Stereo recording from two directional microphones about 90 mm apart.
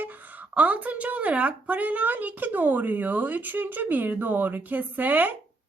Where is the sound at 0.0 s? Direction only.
20° right (ahead or behind).